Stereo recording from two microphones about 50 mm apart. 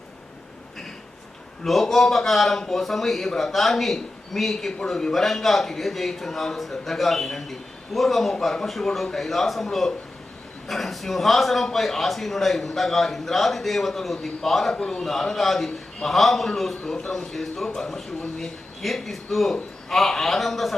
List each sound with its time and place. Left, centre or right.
1.6 s a man's voice: centre
14.8 s a man's voice: centre
15.0 s a man's voice: centre
16.9 s a man's voice: centre